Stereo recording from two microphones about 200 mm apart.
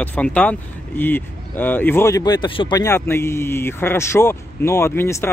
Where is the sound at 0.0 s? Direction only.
5° left (ahead or behind).